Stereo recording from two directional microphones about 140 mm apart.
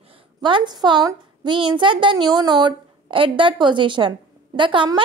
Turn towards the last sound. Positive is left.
turn(degrees=-35)  # may be behind; listen again after turning